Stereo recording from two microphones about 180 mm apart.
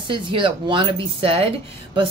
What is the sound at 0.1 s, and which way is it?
Speech, 25° right (ahead or behind).